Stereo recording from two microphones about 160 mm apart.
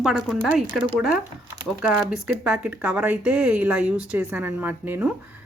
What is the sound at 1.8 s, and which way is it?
Speech, 5° right (ahead or behind).